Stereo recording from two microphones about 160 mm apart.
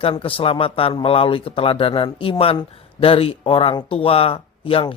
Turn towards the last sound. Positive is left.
turn(degrees=35)  # may be behind; listen again after turning